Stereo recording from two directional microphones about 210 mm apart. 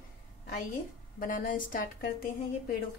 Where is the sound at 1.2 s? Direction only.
40° left (ahead or behind).